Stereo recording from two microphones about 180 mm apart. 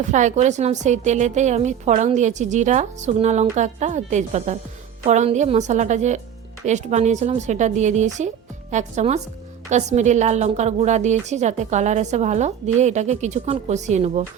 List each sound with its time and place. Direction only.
0.1 s a woman's voice: 40° right (ahead or behind)